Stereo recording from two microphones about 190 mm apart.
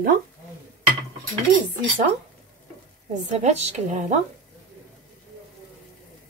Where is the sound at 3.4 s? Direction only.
35° right (ahead or behind).